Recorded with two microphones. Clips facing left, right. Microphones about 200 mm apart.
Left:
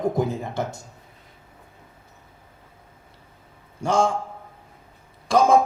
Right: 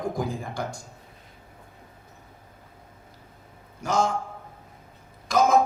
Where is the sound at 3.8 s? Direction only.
30° left (ahead or behind).